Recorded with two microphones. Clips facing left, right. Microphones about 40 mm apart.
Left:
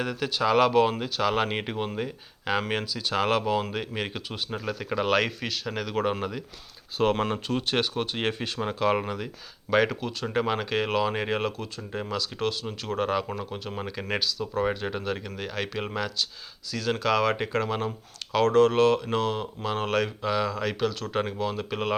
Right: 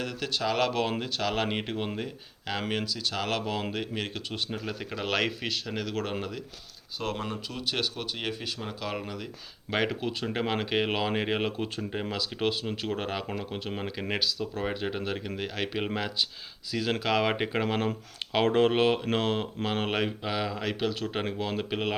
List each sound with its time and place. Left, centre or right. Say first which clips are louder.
0.0 s speech: left 4 dB; centre
3.4 s speech: left 4 dB; centre
7.0 s speech: left 9 dB; left
7.8 s speech: left 5 dB; left
9.0 s speech: left 5 dB; centre
9.6 s speech: left 5 dB; centre
12.9 s speech: left 8 dB; centre